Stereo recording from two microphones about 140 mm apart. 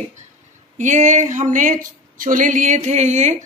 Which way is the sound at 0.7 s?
60° right (ahead or behind).